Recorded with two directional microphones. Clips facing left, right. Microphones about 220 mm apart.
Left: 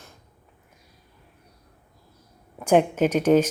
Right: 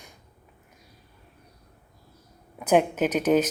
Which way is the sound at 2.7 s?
10° right (ahead or behind).